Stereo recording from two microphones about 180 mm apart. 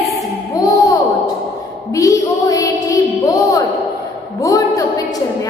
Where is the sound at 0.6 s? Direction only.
20° left (ahead or behind).